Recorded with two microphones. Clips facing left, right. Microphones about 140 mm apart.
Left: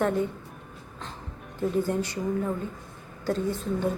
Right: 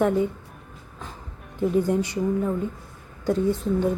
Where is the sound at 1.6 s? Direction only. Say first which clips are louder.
Right 4 dB; 15° right (ahead or behind).